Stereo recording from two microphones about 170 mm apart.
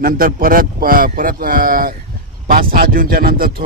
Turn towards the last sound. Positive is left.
turn(degrees=-60)  # may be behind; listen again after turning